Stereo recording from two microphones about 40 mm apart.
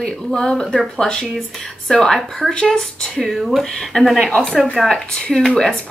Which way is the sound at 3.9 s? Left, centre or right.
Left.